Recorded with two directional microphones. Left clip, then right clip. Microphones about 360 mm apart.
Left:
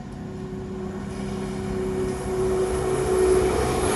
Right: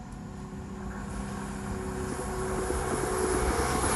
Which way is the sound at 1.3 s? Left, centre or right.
Centre.